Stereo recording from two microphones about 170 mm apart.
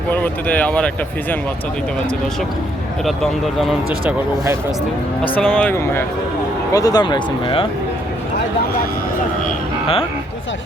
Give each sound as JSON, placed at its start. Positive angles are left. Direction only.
{"t": 0.1, "sound": "speech", "side_deg": 10}
{"t": 3.1, "sound": "speech", "side_deg": 0}
{"t": 5.2, "sound": "speech", "side_deg": 5}
{"t": 9.8, "sound": "speech", "side_deg": 35}